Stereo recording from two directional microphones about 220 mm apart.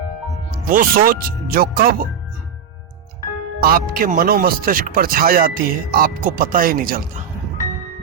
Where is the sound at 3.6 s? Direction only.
40° right (ahead or behind).